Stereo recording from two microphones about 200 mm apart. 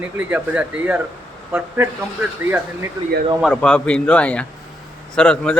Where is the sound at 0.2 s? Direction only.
5° right (ahead or behind).